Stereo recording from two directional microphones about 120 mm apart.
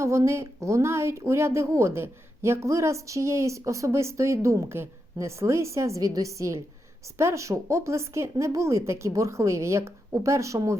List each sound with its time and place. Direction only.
0.0 s a woman's voice: 25° right (ahead or behind)